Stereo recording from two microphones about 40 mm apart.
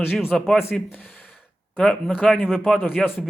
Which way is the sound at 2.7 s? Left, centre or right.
Left.